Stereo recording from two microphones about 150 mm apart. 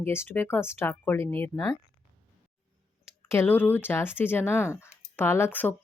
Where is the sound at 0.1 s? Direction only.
15° left (ahead or behind).